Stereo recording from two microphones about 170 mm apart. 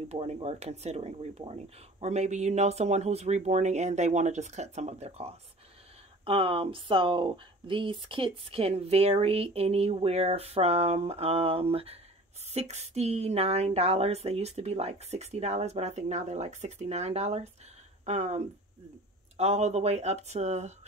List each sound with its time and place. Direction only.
0.1 s speech: 35° right (ahead or behind)